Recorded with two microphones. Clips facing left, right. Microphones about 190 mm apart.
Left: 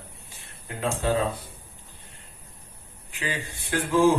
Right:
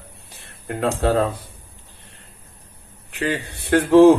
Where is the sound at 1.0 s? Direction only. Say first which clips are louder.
Right 6 dB; 65° right (ahead or behind).